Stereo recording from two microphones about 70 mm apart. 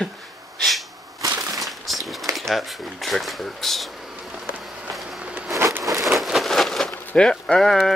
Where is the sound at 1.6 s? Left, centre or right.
Centre.